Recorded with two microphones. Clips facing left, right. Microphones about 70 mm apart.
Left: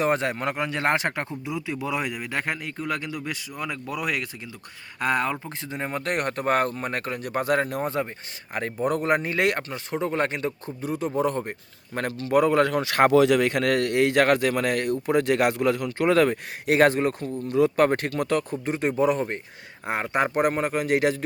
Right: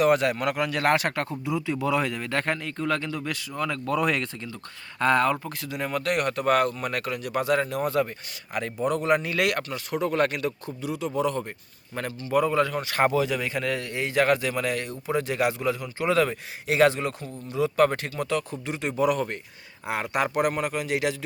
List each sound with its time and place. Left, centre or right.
0.0 s speech: left
5.5 s speech: left
7.8 s speech: left
8.5 s speech: left
10.8 s speech: left
11.9 s speech: left